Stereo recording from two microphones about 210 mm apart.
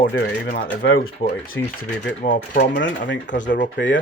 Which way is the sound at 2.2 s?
40° left (ahead or behind).